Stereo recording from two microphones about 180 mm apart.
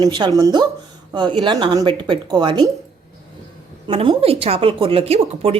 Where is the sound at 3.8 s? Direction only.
30° right (ahead or behind).